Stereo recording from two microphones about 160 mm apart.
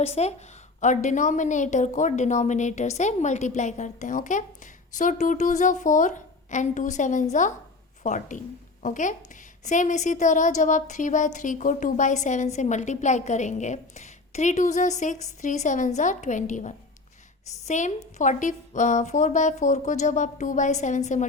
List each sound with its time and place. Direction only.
0.0 s a woman's voice: 40° left (ahead or behind)